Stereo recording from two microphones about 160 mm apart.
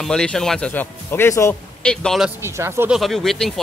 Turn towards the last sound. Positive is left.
turn(degrees=0)  # may be behind; listen again after turning